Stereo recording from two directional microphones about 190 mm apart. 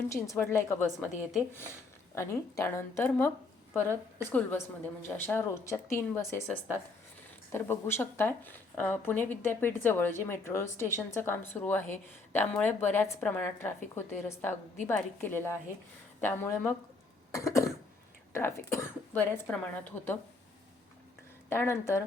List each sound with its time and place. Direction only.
0.1 s speech: 15° left (ahead or behind)
0.9 s a woman's voice: centre (ahead or behind)
2.1 s speech: 15° left (ahead or behind)
7.5 s speech: 10° left (ahead or behind)
21.5 s speech: 15° left (ahead or behind)